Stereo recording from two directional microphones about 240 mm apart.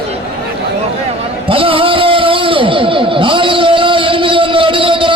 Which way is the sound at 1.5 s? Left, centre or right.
Right.